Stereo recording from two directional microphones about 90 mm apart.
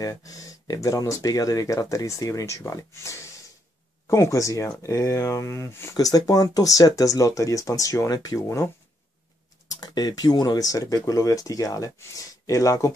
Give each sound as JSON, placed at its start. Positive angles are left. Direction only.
{"t": 0.0, "sound": "speech", "side_deg": 40}
{"t": 5.9, "sound": "speech", "side_deg": 40}
{"t": 9.7, "sound": "speech", "side_deg": 50}